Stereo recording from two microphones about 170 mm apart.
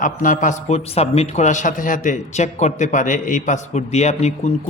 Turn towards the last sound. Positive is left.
turn(degrees=40)  # may be behind; listen again after turning